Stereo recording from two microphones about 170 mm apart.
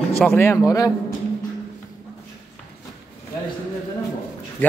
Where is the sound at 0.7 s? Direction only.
20° left (ahead or behind).